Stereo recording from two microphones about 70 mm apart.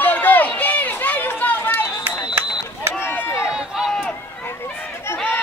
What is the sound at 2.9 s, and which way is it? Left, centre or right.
Run, left.